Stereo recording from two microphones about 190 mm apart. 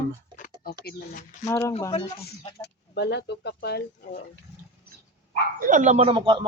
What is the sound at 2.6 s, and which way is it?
Speech, 65° left (ahead or behind).